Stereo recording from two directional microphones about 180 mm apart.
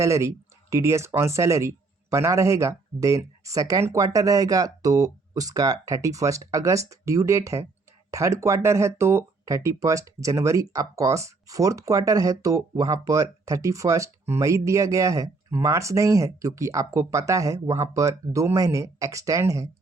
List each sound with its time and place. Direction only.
0.0 s speech: 15° right (ahead or behind)